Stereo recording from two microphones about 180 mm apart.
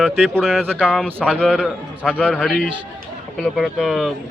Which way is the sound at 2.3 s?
5° left (ahead or behind).